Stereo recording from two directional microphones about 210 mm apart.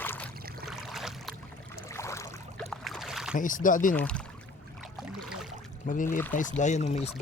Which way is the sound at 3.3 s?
40° left (ahead or behind).